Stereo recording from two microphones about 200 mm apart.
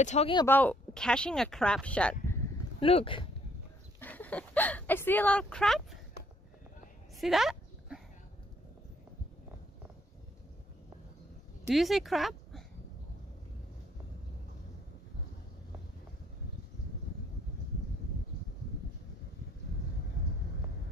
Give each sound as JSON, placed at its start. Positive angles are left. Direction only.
{"t": 0.0, "sound": "speech", "side_deg": 35}
{"t": 0.5, "sound": "speech", "side_deg": 10}
{"t": 2.8, "sound": "speech", "side_deg": 30}
{"t": 4.0, "sound": "speech", "side_deg": 10}
{"t": 7.2, "sound": "dog", "side_deg": 0}
{"t": 11.7, "sound": "speech", "side_deg": 0}